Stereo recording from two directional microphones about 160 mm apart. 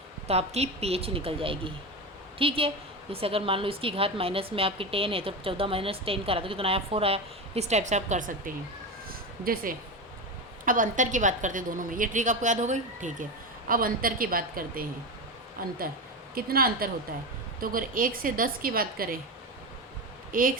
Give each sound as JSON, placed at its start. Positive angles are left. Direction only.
{"t": 0.3, "sound": "a woman's voice", "side_deg": -40}
{"t": 9.0, "sound": "cat", "side_deg": -65}
{"t": 10.7, "sound": "a woman's voice", "side_deg": -55}
{"t": 13.7, "sound": "a woman's voice", "side_deg": -60}
{"t": 20.3, "sound": "a woman's voice", "side_deg": -60}